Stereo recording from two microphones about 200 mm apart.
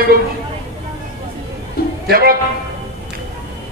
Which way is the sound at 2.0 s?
50° right (ahead or behind).